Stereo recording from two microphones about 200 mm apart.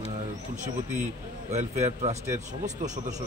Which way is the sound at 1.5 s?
35° right (ahead or behind).